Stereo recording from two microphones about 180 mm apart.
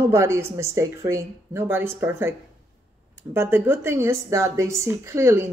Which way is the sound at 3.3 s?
10° right (ahead or behind).